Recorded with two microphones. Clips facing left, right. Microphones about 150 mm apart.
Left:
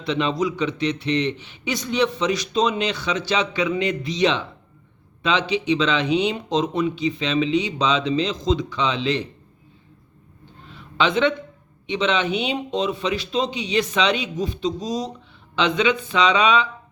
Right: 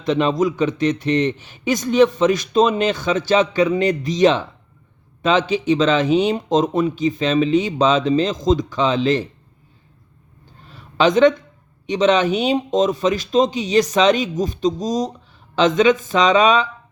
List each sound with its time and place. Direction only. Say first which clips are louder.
0.0 s a man's voice: right 5 dB; 45° right (ahead or behind)
10.7 s a sound: right 5 dB; 40° right (ahead or behind)
11.9 s a man's voice: right 6 dB; 40° right (ahead or behind)